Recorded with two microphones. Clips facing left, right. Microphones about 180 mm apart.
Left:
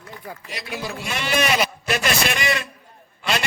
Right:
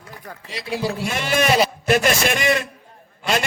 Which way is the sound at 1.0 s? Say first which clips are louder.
Right 1 dB; 45° right (ahead or behind).